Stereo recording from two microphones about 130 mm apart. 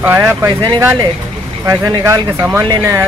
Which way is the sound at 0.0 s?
20° right (ahead or behind).